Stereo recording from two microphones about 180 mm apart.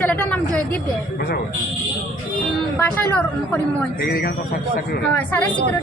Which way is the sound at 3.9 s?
60° left (ahead or behind).